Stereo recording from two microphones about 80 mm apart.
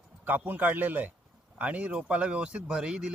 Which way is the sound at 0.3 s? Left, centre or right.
Right.